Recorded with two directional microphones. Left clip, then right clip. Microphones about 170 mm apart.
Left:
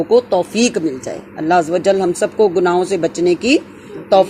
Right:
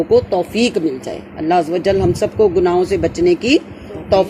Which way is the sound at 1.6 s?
20° left (ahead or behind).